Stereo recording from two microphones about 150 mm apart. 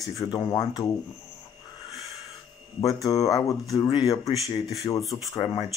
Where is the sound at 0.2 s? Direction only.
25° left (ahead or behind).